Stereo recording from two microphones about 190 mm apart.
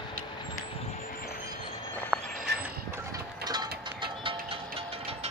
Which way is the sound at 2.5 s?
60° right (ahead or behind).